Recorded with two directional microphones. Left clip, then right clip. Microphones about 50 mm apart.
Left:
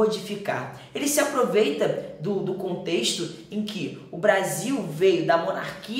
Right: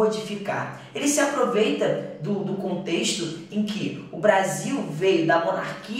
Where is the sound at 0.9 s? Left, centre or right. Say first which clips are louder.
Right 1 dB; right.